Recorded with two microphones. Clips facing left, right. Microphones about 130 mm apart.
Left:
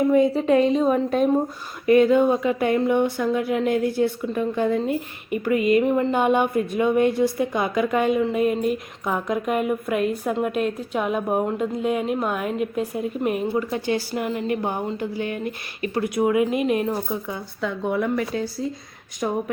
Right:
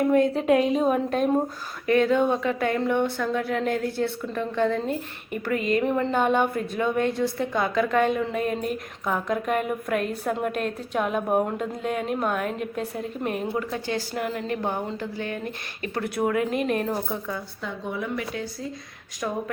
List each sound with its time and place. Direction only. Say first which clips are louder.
0.0 s a woman's voice: left 3 dB; centre (ahead or behind)
17.6 s a woman's voice: left 11 dB; 60° left (ahead or behind)